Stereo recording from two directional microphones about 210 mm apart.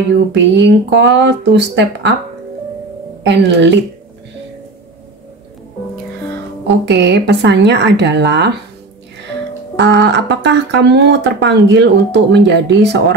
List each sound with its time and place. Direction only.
0.3 s speech: 55° right (ahead or behind)
3.3 s speech: 55° right (ahead or behind)
6.9 s speech: 55° right (ahead or behind)
9.8 s speech: 55° right (ahead or behind)